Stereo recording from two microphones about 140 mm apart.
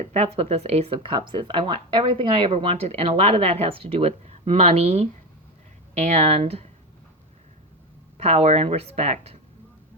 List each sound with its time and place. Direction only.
0.0 s speech: 50° right (ahead or behind)
0.9 s speech: 35° right (ahead or behind)
8.2 s speech: 50° right (ahead or behind)